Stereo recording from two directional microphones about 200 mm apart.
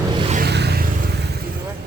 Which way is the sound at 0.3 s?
55° right (ahead or behind).